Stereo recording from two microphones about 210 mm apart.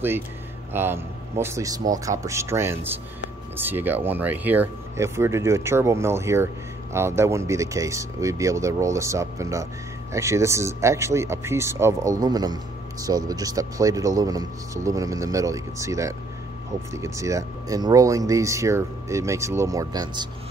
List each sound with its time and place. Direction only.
0.7 s a man's voice: 10° right (ahead or behind)